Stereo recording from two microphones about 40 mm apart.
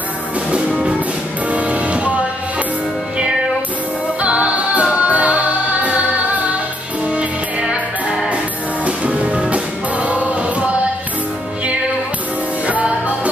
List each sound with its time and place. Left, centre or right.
0.5 s music: right
4.2 s music: right
8.8 s music: right
12.6 s music: right